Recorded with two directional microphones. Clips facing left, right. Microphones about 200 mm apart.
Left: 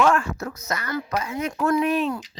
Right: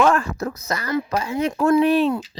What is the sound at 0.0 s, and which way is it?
Speech, 35° right (ahead or behind).